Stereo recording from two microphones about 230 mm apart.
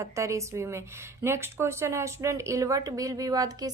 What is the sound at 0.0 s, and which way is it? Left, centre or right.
Speech, centre.